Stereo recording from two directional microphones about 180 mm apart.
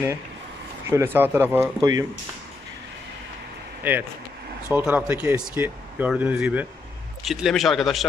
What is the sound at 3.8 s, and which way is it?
Speech, 10° right (ahead or behind).